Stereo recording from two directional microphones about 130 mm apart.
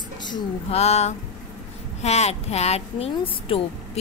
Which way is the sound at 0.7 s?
55° left (ahead or behind).